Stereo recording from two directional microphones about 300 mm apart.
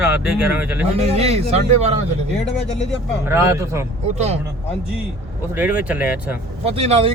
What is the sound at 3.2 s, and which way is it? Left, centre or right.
Speech, centre.